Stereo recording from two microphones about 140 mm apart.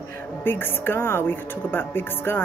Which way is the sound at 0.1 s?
15° left (ahead or behind).